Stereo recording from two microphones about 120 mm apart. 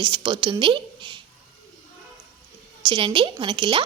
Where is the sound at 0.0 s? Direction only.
40° right (ahead or behind).